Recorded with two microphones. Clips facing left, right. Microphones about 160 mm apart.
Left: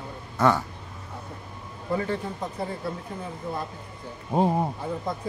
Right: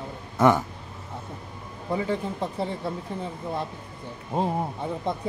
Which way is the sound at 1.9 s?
15° right (ahead or behind).